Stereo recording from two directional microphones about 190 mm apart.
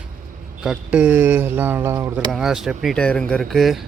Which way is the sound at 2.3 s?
Centre (ahead or behind).